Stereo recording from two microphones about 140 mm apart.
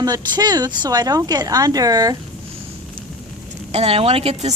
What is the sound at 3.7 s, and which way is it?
Speech, 45° right (ahead or behind).